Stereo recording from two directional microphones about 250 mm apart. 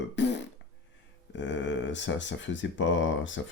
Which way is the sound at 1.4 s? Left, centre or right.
Left.